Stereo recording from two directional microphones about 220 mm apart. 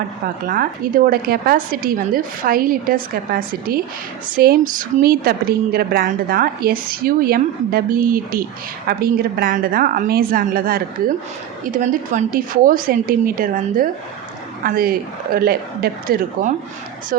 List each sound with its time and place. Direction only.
0.4 s a woman's voice: 40° right (ahead or behind)